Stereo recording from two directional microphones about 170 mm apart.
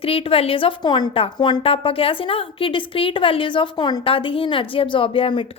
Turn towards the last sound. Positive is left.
turn(degrees=30)  # may be behind; listen again after turning